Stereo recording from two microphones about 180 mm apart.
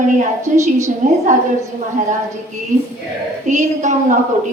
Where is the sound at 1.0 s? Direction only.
45° right (ahead or behind).